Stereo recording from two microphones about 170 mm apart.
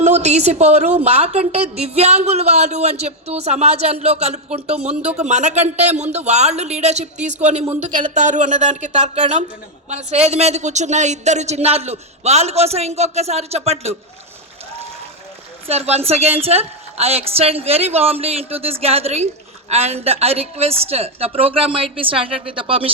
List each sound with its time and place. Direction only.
0.0 s a woman's voice: 40° right (ahead or behind)
15.6 s a woman's voice: 35° right (ahead or behind)